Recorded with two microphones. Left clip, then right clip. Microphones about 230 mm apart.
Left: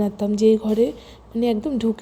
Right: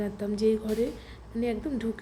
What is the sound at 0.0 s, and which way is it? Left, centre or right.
A woman's voice, left.